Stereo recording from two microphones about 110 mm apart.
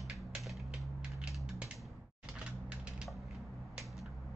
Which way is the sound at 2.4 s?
10° right (ahead or behind).